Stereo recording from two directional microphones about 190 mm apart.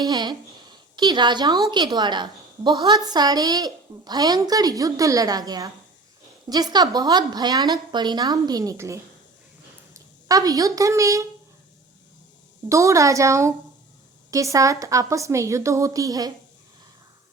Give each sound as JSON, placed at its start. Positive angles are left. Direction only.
{"t": 0.0, "sound": "a woman's voice", "side_deg": -20}
{"t": 12.6, "sound": "a woman's voice", "side_deg": -15}